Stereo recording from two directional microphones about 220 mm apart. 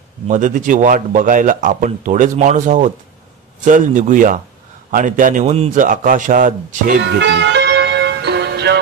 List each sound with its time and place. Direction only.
0.3 s a man's voice: 35° right (ahead or behind)
7.0 s music: 50° right (ahead or behind)